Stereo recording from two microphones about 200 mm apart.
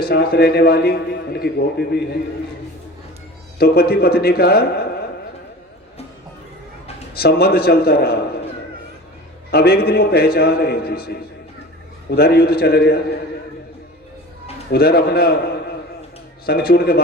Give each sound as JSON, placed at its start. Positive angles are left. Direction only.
{"t": 0.0, "sound": "a man's voice", "side_deg": 50}
{"t": 3.6, "sound": "a man's voice", "side_deg": 50}
{"t": 7.1, "sound": "a man's voice", "side_deg": 50}
{"t": 9.5, "sound": "a man's voice", "side_deg": 50}
{"t": 14.7, "sound": "a man's voice", "side_deg": 50}
{"t": 16.5, "sound": "a man's voice", "side_deg": 50}